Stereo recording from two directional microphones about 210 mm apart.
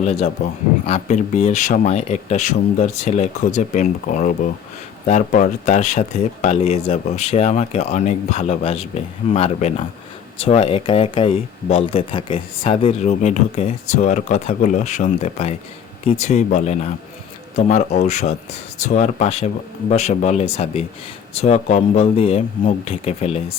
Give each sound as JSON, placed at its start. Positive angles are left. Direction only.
{"t": 0.0, "sound": "a man's voice", "side_deg": 30}